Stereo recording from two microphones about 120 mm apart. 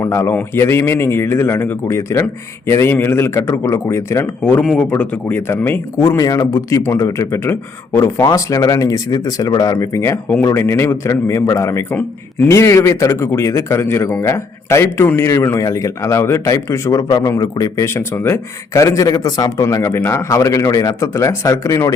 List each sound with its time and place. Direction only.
0.0 s speech: 25° left (ahead or behind)
6.1 s speech: 30° left (ahead or behind)